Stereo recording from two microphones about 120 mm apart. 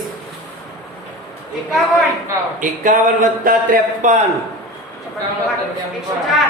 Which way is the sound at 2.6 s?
90° right.